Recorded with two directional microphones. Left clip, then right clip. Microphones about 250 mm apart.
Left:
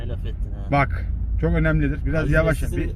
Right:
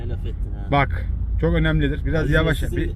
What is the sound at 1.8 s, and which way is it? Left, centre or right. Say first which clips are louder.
Speech: right 1 dB; left.